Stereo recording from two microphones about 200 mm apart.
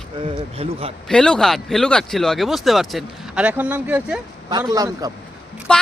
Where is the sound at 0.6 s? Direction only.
30° right (ahead or behind).